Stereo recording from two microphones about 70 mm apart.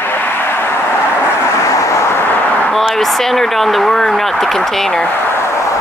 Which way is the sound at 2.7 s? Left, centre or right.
Centre.